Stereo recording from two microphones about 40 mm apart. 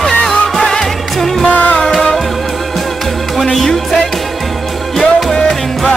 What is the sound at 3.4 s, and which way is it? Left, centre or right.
Music, centre.